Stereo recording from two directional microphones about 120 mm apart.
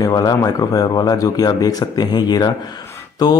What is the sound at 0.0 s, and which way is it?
Speech, 35° left (ahead or behind).